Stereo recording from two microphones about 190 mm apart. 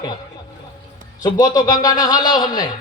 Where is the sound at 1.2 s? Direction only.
20° left (ahead or behind).